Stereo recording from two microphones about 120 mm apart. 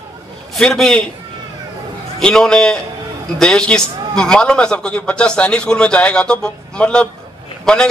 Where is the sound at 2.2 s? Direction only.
5° left (ahead or behind).